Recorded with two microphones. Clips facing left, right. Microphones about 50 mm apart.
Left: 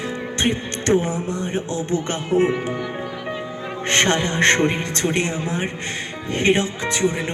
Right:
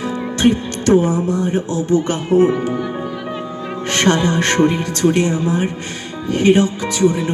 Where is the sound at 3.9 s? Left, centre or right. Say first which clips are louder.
Right 4 dB; left.